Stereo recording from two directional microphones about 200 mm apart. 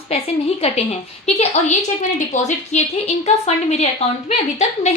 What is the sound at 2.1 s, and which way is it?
A woman's voice, 35° left (ahead or behind).